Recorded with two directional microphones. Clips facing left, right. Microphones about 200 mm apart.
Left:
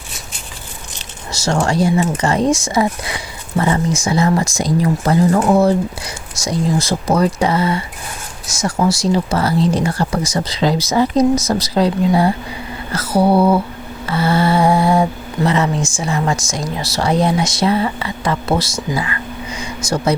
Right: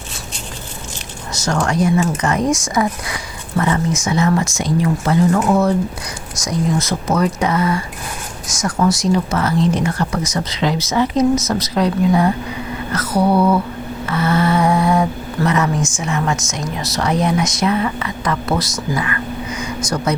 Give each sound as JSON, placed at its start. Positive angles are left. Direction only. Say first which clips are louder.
{"t": 1.3, "sound": "speech", "louder": "left 2 dB", "side_deg": 25}
{"t": 8.9, "sound": "speech", "louder": "even", "side_deg": 30}
{"t": 14.1, "sound": "lullaby", "louder": "left 1 dB", "side_deg": 30}
{"t": 15.4, "sound": "speech", "louder": "left 1 dB", "side_deg": 25}